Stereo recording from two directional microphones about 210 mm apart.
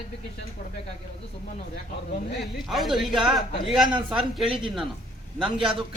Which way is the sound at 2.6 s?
Centre (ahead or behind).